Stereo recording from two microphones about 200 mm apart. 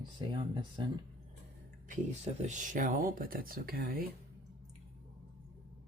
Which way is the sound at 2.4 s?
40° right (ahead or behind).